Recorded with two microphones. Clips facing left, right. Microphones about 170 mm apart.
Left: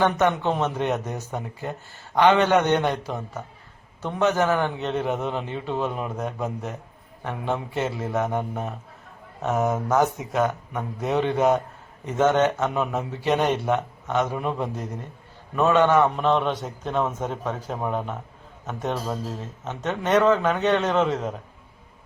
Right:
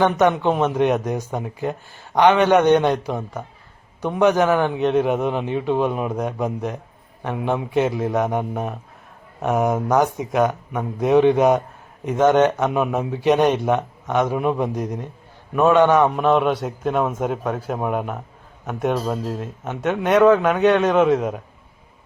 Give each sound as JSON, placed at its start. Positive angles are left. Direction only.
{"t": 0.0, "sound": "speech", "side_deg": -15}